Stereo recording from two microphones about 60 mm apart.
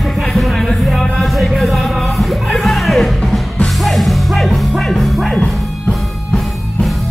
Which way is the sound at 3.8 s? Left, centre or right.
Centre.